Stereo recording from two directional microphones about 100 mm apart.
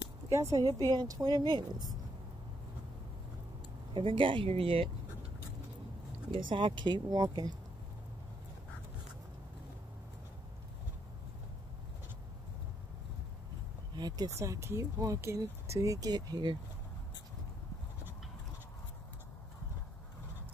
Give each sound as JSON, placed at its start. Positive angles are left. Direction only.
{"t": 0.3, "sound": "speech", "side_deg": -30}
{"t": 0.7, "sound": "speech", "side_deg": -45}
{"t": 3.9, "sound": "speech", "side_deg": -60}
{"t": 6.3, "sound": "speech", "side_deg": -55}
{"t": 13.9, "sound": "speech", "side_deg": -40}